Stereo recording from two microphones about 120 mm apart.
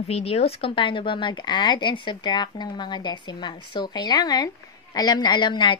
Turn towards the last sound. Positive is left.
turn(degrees=40)  # may be behind; listen again after turning